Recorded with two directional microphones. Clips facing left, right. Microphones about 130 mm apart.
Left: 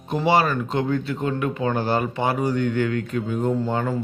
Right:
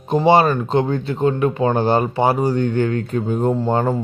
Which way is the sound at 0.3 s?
25° right (ahead or behind).